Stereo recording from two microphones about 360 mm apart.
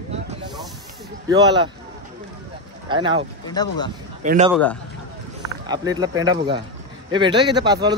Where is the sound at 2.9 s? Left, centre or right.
Centre.